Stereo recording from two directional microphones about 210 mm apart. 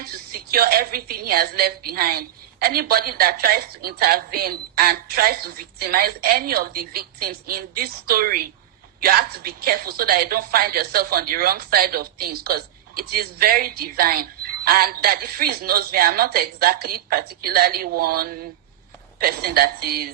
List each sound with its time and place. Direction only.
0.0 s a woman's voice: 45° right (ahead or behind)